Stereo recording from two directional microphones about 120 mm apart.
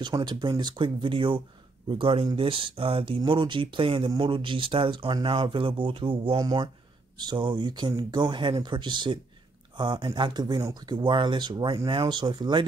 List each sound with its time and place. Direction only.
0.0 s speech: 40° right (ahead or behind)
6.3 s speech: 30° right (ahead or behind)